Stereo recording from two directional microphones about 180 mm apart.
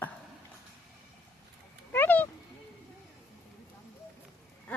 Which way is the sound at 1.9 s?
10° left (ahead or behind).